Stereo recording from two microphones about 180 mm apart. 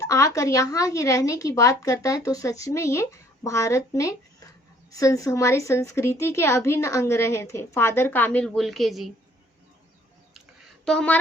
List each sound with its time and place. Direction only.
0.0 s a woman's voice: 20° left (ahead or behind); by 9.0 s centre (ahead or behind)
10.8 s speech: 5° left (ahead or behind)